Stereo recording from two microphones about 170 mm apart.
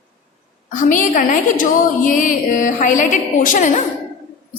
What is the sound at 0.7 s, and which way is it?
A woman's voice, 50° left (ahead or behind).